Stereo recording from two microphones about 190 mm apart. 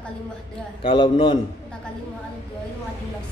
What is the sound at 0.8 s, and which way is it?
Speech, 30° left (ahead or behind).